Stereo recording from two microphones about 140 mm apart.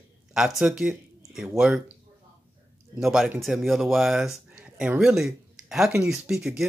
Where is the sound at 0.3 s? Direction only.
5° right (ahead or behind).